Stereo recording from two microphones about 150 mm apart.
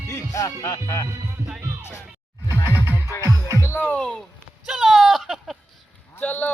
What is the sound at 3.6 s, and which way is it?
Music, 15° left (ahead or behind).